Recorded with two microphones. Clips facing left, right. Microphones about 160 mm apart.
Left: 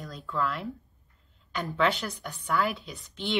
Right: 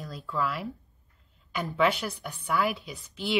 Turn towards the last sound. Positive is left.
turn(degrees=0)  # may be behind; listen again after turning